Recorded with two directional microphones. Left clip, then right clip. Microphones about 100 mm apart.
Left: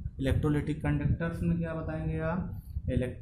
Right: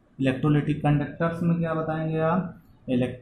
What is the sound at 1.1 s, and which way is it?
Speech, 5° left (ahead or behind).